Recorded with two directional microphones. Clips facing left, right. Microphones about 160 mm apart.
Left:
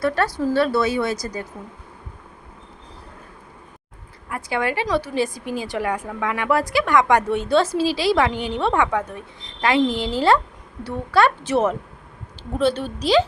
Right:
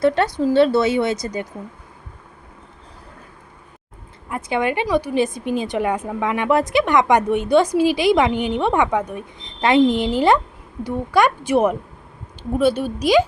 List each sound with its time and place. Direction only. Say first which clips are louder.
0.0 s a woman's voice: right 4 dB; 25° right (ahead or behind)
4.3 s a woman's voice: right 3 dB; 20° right (ahead or behind)